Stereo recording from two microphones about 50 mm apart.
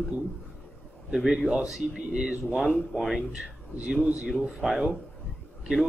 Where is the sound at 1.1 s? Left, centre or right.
Centre.